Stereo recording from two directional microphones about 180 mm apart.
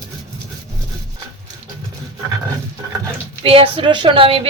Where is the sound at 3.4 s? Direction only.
30° right (ahead or behind).